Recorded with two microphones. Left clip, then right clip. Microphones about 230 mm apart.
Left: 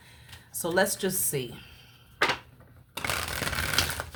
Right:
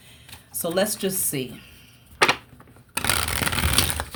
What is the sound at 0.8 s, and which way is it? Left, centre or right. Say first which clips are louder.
Speech: right 1 dB; centre.